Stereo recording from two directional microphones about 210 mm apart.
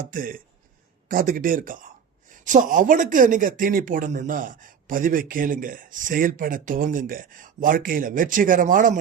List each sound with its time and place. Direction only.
0.1 s speech: 40° right (ahead or behind)